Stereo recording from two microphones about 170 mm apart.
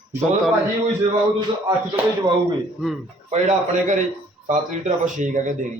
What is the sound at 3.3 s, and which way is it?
Speech, 45° right (ahead or behind).